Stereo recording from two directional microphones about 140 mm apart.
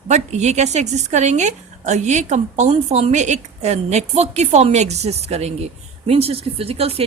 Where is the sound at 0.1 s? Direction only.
55° right (ahead or behind).